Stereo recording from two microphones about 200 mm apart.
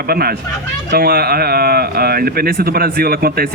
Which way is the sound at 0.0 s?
50° right (ahead or behind).